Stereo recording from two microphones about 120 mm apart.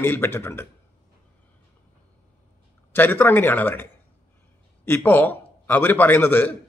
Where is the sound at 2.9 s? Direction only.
15° left (ahead or behind).